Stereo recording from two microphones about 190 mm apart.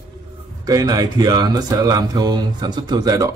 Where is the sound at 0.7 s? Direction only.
20° right (ahead or behind).